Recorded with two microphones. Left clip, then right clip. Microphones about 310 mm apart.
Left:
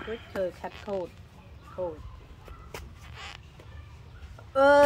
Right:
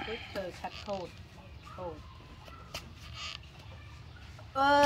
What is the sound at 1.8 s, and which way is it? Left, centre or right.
Speech, left.